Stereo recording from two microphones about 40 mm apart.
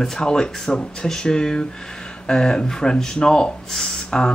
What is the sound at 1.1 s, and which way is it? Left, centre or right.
Speech, centre.